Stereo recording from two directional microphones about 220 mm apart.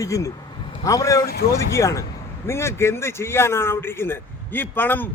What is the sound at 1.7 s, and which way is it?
Speech, 15° left (ahead or behind).